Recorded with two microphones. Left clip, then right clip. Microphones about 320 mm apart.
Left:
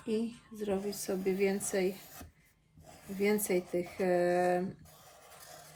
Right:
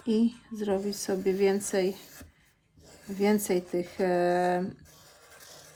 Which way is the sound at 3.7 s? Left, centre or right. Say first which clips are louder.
Right 3 dB; right.